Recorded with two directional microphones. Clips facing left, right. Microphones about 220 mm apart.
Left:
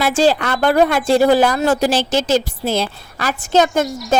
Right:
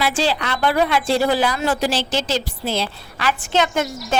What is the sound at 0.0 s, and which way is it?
A woman's voice, 45° left (ahead or behind).